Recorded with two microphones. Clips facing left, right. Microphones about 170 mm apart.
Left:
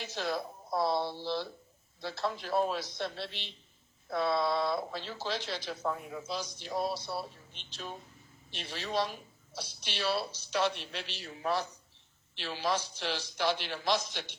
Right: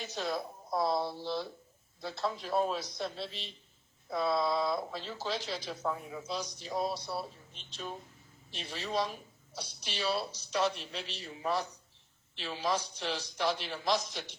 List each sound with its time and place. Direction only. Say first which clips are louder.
0.0 s speech: left 1 dB; centre (ahead or behind)